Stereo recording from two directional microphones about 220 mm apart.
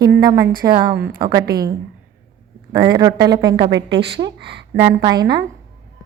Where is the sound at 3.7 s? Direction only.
50° right (ahead or behind).